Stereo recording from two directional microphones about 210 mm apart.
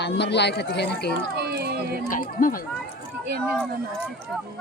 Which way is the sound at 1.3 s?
50° right (ahead or behind).